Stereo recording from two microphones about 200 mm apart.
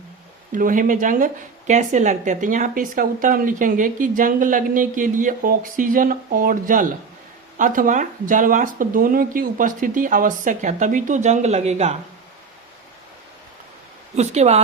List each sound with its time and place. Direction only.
0.5 s speech: 40° right (ahead or behind)
14.2 s speech: 35° right (ahead or behind)